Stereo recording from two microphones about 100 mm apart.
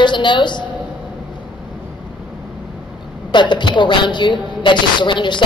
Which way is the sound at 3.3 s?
50° left (ahead or behind).